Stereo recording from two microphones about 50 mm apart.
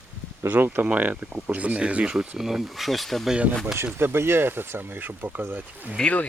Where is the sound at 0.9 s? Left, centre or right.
Right.